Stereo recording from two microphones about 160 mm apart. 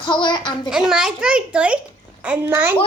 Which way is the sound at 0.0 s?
30° left (ahead or behind).